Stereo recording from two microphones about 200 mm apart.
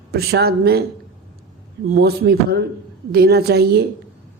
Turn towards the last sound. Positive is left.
turn(degrees=-50)  # may be behind; listen again after turning